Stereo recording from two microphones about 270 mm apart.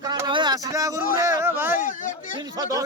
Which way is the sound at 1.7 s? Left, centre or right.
Left.